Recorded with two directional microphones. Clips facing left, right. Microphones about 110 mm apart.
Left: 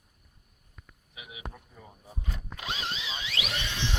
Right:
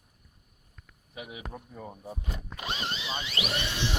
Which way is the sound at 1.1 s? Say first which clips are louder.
Right 4 dB; 45° right (ahead or behind).